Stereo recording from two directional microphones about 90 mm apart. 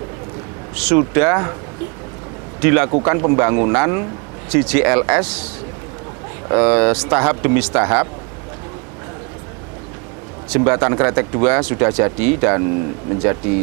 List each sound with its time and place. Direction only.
0.7 s speech: 15° right (ahead or behind)
2.6 s speech: 15° right (ahead or behind)
6.5 s speech: 15° right (ahead or behind)
10.6 s speech: 20° right (ahead or behind)